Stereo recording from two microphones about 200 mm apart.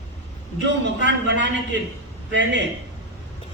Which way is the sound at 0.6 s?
65° right (ahead or behind).